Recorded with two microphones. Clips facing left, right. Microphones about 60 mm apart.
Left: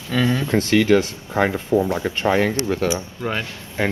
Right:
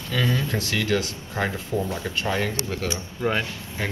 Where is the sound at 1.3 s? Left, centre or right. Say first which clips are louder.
Left 8 dB; left.